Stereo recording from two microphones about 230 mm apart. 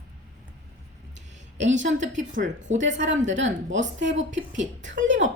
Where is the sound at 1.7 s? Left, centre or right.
Right.